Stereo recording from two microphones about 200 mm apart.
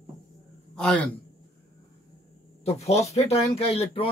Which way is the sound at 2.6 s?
30° left (ahead or behind).